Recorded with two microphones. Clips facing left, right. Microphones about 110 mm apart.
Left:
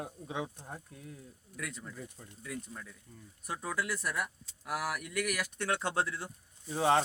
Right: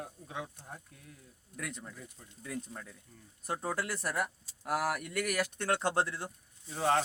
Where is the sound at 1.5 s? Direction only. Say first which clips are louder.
Even; 30° right (ahead or behind).